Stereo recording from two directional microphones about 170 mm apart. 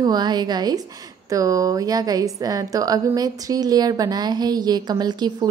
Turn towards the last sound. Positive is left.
turn(degrees=-25)  # may be behind; listen again after turning